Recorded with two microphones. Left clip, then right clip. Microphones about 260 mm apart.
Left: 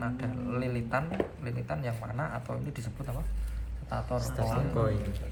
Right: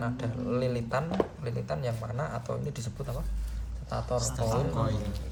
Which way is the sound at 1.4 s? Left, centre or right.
Right.